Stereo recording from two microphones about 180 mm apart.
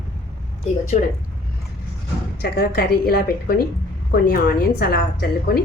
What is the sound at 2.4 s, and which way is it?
A woman's voice, 60° left (ahead or behind).